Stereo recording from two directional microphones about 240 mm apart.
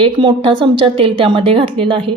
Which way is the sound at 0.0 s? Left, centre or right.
Right.